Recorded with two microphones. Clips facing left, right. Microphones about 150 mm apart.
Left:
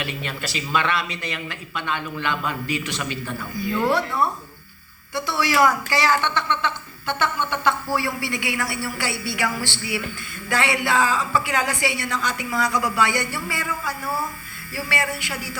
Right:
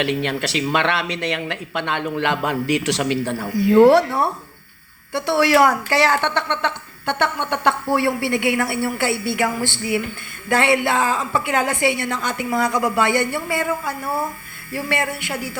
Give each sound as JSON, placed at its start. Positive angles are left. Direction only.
{"t": 0.0, "sound": "speech", "side_deg": -70}
{"t": 5.1, "sound": "a woman's voice", "side_deg": -60}